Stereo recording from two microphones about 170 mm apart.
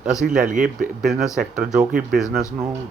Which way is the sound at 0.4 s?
50° right (ahead or behind).